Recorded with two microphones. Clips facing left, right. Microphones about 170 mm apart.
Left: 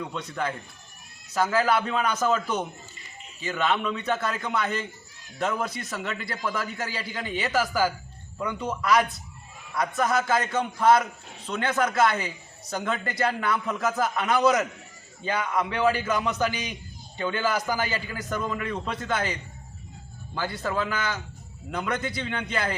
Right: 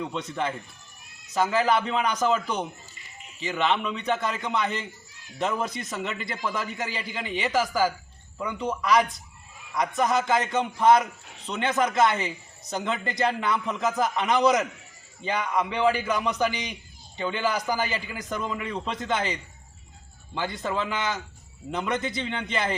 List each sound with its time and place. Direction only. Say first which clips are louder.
0.0 s a man's voice: right 1 dB; 20° right (ahead or behind)